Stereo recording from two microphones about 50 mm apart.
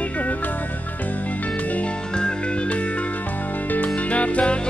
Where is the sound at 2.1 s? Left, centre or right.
Centre.